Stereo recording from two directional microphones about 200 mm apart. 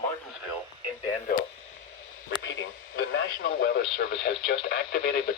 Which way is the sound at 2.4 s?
65° left (ahead or behind).